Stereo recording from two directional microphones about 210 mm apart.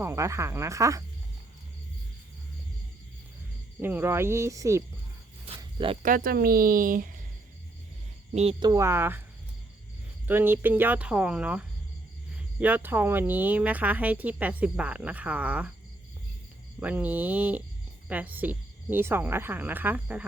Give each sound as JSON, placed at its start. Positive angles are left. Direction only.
{"t": 0.0, "sound": "speech", "side_deg": -15}
{"t": 3.8, "sound": "speech", "side_deg": -10}
{"t": 5.5, "sound": "snake", "side_deg": -25}
{"t": 6.0, "sound": "speech", "side_deg": -40}
{"t": 8.3, "sound": "speech", "side_deg": -30}
{"t": 10.2, "sound": "speech", "side_deg": -10}
{"t": 16.8, "sound": "speech", "side_deg": -5}